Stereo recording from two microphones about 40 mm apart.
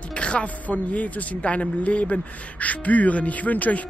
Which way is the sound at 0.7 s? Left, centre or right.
Left.